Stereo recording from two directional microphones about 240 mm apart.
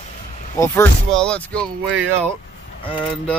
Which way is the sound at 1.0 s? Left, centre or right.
Centre.